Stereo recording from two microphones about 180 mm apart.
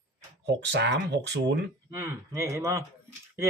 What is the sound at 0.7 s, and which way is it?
Speech, 75° right (ahead or behind).